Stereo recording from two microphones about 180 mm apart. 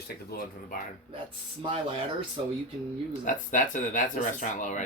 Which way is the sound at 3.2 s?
45° left (ahead or behind).